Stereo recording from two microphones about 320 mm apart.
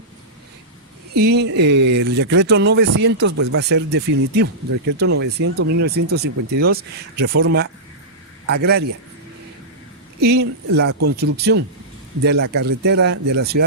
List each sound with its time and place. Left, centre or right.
1.1 s speech: right
10.2 s speech: right